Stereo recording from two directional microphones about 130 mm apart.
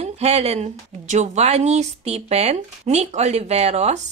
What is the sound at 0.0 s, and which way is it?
Speech, 55° right (ahead or behind).